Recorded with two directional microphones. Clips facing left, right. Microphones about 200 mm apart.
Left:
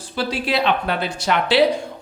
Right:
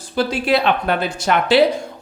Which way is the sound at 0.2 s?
50° right (ahead or behind).